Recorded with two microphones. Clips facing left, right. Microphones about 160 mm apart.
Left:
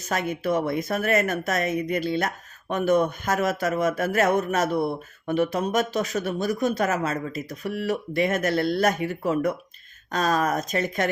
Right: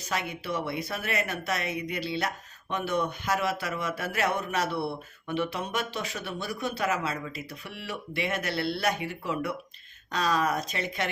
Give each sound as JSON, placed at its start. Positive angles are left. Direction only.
{"t": 0.0, "sound": "speech", "side_deg": 45}